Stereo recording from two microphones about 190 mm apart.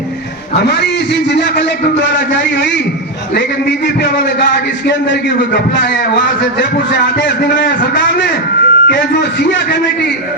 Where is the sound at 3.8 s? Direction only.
60° left (ahead or behind).